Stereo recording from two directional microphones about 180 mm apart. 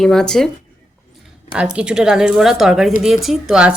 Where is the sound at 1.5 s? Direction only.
5° right (ahead or behind).